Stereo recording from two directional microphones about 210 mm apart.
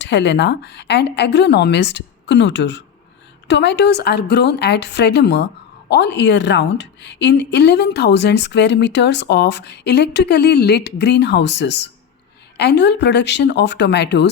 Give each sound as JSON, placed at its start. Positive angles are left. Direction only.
{"t": 0.0, "sound": "speech", "side_deg": 55}